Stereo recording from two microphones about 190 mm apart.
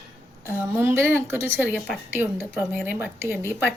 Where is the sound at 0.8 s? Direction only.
10° right (ahead or behind).